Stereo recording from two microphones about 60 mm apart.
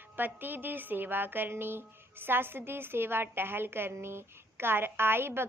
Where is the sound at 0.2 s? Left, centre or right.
Right.